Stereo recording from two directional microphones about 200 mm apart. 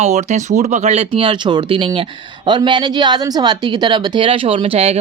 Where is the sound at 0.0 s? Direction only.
35° right (ahead or behind).